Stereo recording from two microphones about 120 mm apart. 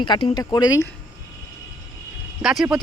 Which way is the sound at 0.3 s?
35° left (ahead or behind).